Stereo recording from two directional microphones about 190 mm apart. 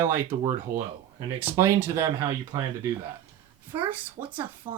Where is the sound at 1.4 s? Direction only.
15° right (ahead or behind).